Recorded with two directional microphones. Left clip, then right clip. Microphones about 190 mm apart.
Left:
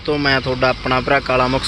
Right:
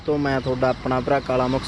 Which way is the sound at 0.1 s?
10° right (ahead or behind).